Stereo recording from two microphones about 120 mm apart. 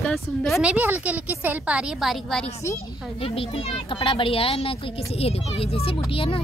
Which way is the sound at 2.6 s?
25° left (ahead or behind).